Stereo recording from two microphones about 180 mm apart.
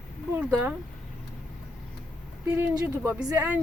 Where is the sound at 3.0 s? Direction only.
10° right (ahead or behind).